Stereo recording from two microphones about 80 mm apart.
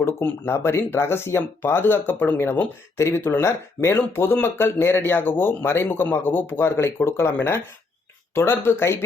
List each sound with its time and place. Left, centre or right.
0.0 s speech: left